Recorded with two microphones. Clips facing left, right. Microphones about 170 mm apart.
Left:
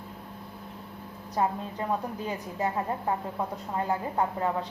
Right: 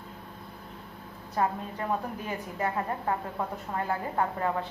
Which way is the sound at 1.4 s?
20° left (ahead or behind).